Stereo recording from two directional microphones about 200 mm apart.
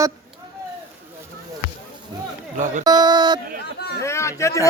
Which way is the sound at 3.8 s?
55° left (ahead or behind).